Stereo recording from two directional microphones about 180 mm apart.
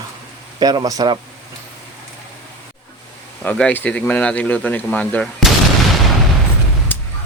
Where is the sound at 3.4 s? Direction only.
5° left (ahead or behind).